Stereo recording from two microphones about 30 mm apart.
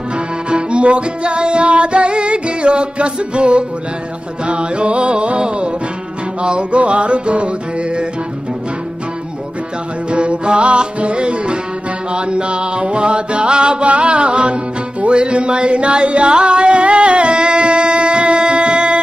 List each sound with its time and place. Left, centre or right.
0.5 s music: right
6.4 s music: right
10.1 s music: right